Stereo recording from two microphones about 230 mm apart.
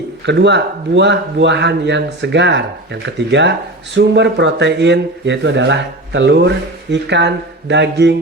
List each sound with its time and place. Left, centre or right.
0.3 s a man's voice: right